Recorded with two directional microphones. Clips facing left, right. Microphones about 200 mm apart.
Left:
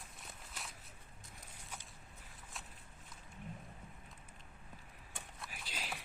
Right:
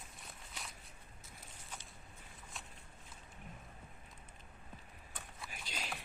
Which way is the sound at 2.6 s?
Centre (ahead or behind).